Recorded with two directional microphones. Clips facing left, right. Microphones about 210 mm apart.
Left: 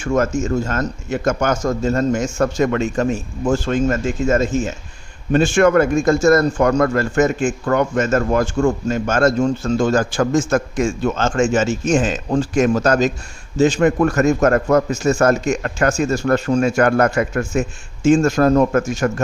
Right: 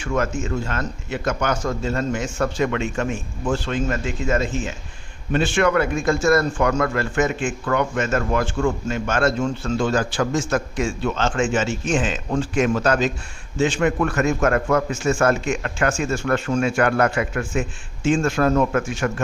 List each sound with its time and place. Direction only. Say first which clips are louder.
0.0 s a man's voice: left 5 dB; 45° left (ahead or behind)